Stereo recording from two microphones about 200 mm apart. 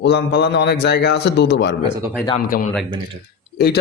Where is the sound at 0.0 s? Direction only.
55° left (ahead or behind).